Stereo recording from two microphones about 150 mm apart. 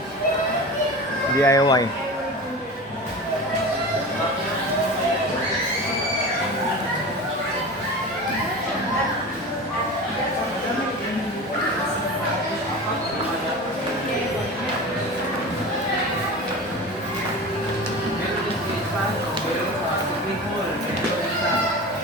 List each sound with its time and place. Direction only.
1.4 s speech: 20° left (ahead or behind)